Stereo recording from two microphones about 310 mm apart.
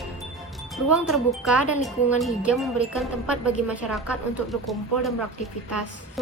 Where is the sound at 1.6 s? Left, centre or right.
Left.